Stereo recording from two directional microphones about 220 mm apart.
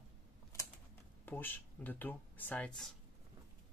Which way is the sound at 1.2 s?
10° left (ahead or behind).